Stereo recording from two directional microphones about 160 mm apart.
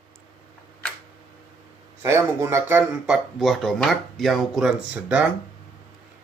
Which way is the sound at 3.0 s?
Centre (ahead or behind).